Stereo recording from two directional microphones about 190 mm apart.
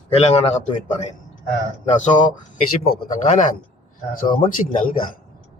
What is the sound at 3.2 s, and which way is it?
Speech, 40° left (ahead or behind).